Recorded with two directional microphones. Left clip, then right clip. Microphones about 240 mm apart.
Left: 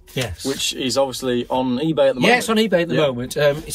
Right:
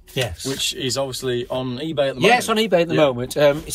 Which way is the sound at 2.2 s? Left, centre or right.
Centre.